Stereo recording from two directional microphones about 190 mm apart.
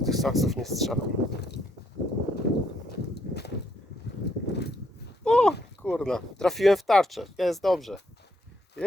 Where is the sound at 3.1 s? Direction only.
60° left (ahead or behind).